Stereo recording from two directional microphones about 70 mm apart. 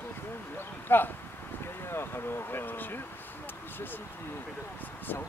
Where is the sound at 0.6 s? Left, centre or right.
Left.